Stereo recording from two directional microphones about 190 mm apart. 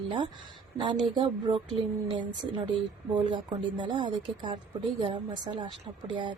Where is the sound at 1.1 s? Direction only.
25° right (ahead or behind).